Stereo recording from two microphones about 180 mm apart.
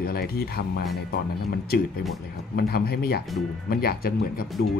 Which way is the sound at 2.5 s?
60° left (ahead or behind).